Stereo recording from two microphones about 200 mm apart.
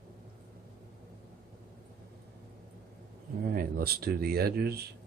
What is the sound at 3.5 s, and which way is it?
Speech, 50° right (ahead or behind).